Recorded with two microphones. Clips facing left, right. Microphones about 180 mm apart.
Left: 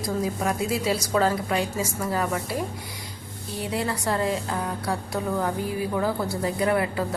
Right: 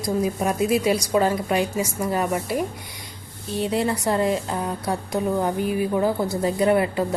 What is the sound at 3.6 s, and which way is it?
A woman's voice, 20° right (ahead or behind).